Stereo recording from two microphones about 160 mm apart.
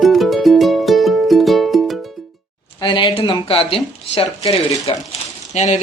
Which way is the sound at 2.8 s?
30° left (ahead or behind).